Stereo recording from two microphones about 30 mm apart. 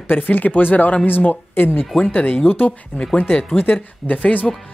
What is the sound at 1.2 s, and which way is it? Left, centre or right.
A woman's voice, left.